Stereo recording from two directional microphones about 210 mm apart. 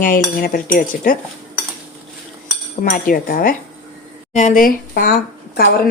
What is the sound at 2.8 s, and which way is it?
A woman's voice, 40° left (ahead or behind).